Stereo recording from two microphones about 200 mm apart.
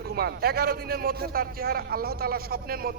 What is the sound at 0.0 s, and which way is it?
A man's voice, 50° right (ahead or behind).